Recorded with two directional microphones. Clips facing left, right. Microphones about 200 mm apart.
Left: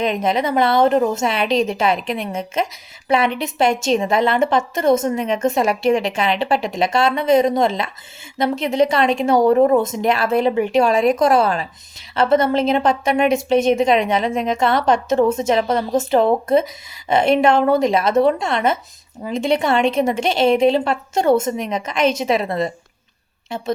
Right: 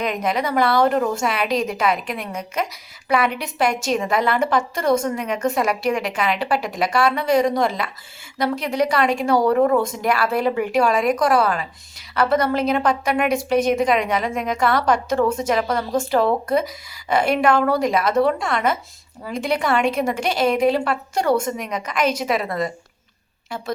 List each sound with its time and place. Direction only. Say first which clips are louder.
0.0 s speech: left 3 dB; 25° left (ahead or behind)